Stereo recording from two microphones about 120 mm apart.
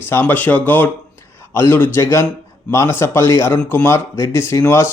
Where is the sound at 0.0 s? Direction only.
20° left (ahead or behind).